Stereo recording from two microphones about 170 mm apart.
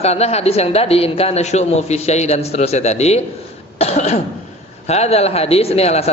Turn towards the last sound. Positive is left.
turn(degrees=40)  # may be behind; listen again after turning